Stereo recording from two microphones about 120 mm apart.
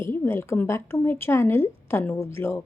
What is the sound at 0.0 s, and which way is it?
A woman's voice, 20° left (ahead or behind).